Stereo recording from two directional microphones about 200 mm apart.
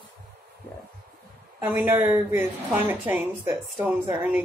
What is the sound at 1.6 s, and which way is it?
A woman's voice, 10° right (ahead or behind).